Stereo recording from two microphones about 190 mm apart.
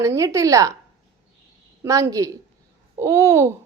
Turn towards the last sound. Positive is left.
turn(degrees=-15)  # may be behind; listen again after turning